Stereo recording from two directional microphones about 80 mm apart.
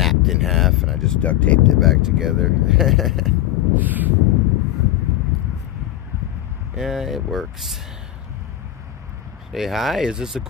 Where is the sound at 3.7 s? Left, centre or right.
Right.